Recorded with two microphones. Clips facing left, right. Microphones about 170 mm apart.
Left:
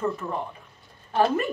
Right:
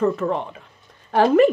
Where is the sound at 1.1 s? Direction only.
85° right.